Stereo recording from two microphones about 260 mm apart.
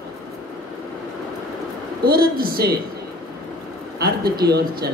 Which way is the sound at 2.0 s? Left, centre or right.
Right.